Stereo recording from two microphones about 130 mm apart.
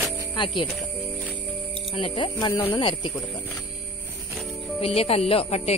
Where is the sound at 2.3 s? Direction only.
25° left (ahead or behind).